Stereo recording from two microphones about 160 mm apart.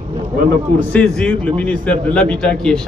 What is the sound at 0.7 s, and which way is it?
A man's voice, 10° left (ahead or behind).